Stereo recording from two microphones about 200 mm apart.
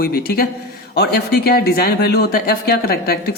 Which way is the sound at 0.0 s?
50° left (ahead or behind).